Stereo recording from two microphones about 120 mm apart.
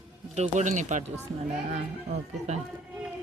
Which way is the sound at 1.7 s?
75° right (ahead or behind).